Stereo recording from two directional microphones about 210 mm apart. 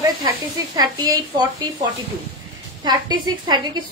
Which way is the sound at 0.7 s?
20° right (ahead or behind).